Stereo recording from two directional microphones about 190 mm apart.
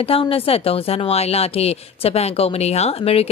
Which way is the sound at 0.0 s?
30° left (ahead or behind).